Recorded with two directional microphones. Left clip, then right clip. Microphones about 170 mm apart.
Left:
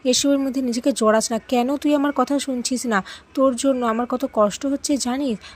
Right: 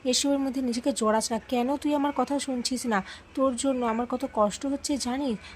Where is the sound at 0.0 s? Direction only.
25° left (ahead or behind).